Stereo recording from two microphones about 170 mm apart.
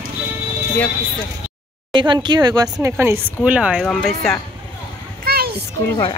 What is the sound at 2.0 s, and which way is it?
A woman's voice, 25° right (ahead or behind).